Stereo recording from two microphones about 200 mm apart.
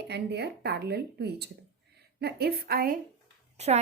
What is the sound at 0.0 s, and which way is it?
A woman's voice, 55° right (ahead or behind).